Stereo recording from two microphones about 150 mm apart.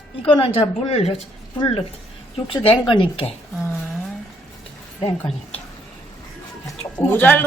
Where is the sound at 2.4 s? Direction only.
35° left (ahead or behind).